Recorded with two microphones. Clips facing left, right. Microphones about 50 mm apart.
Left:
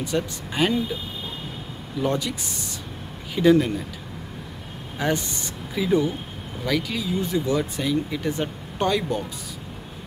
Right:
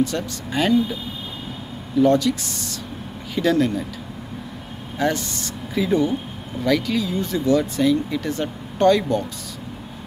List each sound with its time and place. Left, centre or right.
0.0 s speech: centre
2.0 s speech: centre
4.9 s speech: centre
5.8 s speech: centre